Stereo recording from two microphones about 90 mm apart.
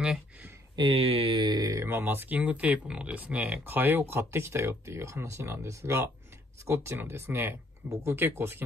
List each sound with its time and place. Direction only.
0.7 s speech: 80° right; by 1.6 s 65° right (ahead or behind)
1.6 s speech: 40° right (ahead or behind)